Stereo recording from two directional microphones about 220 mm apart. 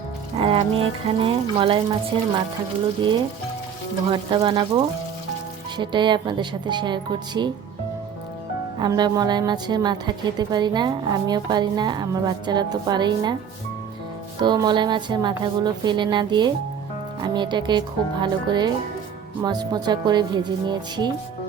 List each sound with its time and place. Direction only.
0.3 s a woman's voice: 25° right (ahead or behind)
4.1 s a woman's voice: 20° right (ahead or behind)
8.8 s a woman's voice: 20° right (ahead or behind)
14.4 s a woman's voice: 20° right (ahead or behind)